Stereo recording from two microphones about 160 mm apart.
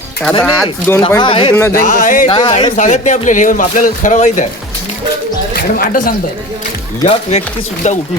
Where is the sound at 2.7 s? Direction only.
50° left (ahead or behind).